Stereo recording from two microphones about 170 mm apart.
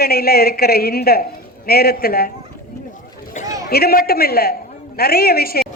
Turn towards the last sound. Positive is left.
turn(degrees=65)  # may be behind; listen again after turning